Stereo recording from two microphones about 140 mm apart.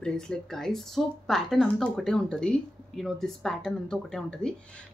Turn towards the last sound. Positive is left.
turn(degrees=5)  # may be behind; listen again after turning